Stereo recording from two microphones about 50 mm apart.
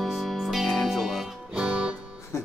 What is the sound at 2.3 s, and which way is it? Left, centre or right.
Music, left.